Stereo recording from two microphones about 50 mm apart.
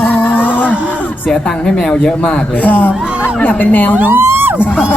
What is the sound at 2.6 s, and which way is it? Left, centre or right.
Speech, left.